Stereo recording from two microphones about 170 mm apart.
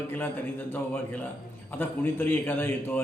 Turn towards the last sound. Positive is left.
turn(degrees=10)  # may be behind; listen again after turning